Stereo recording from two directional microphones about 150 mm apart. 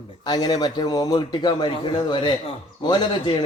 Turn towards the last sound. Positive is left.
turn(degrees=30)  # may be behind; listen again after turning